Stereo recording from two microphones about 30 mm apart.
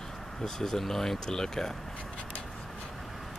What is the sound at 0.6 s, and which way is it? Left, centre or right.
Speech, centre.